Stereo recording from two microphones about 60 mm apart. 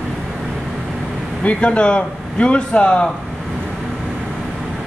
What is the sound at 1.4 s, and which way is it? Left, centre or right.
Speech, centre.